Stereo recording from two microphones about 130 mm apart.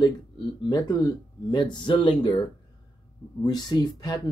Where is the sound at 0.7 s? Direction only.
30° left (ahead or behind).